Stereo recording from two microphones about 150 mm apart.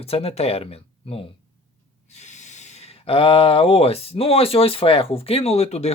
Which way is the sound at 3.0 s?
40° left (ahead or behind).